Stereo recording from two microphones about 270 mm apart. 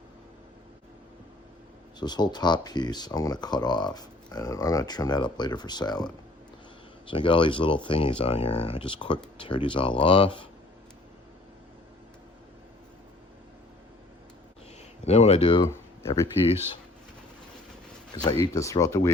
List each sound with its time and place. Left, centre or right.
2.0 s speech: centre
7.1 s speech: centre
15.0 s speech: left
18.1 s speech: centre